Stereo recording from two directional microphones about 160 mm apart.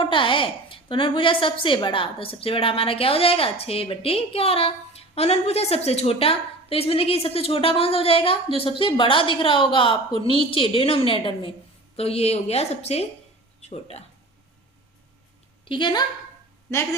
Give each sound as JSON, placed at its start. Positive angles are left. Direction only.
{"t": 0.0, "sound": "a woman's voice", "side_deg": 30}
{"t": 15.6, "sound": "a woman's voice", "side_deg": 30}